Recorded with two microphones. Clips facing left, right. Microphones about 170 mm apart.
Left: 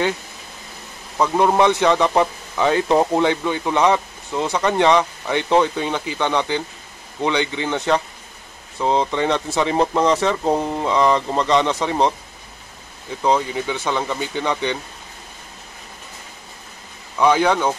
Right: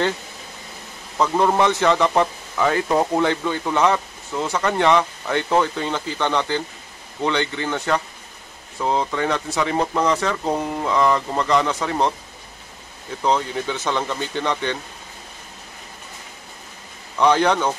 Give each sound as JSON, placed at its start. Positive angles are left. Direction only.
{"t": 1.1, "sound": "a man's voice", "side_deg": 10}
{"t": 13.2, "sound": "a man's voice", "side_deg": 10}
{"t": 17.2, "sound": "a man's voice", "side_deg": 10}